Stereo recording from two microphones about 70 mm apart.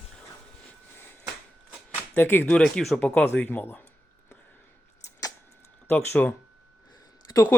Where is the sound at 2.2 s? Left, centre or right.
Left.